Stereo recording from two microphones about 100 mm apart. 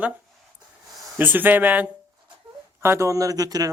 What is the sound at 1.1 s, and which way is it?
Speech, 20° right (ahead or behind).